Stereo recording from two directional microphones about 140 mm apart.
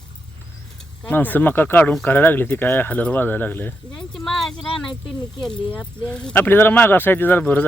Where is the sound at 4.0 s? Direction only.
5° left (ahead or behind).